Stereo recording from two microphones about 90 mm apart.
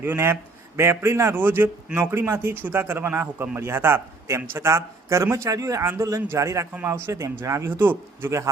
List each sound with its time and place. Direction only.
0.0 s a man's voice: 25° right (ahead or behind)